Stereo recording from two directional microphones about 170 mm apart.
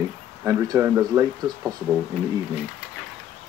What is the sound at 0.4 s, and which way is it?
Speech, 20° right (ahead or behind).